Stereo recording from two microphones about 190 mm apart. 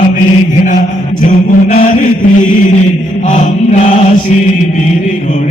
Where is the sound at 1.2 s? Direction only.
40° left (ahead or behind).